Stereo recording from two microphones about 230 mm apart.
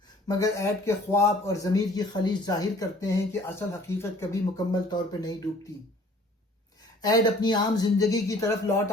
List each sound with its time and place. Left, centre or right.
0.3 s speech: centre
7.0 s speech: centre